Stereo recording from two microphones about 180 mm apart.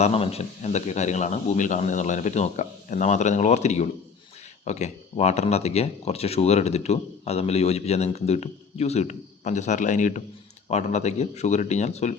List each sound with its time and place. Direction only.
0.0 s speech: 35° left (ahead or behind)